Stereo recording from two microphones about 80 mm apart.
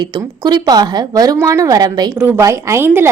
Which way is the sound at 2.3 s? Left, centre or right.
Right.